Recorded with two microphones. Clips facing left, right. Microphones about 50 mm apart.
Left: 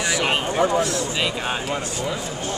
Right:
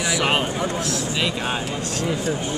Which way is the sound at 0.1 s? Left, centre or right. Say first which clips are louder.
Right 2 dB; centre.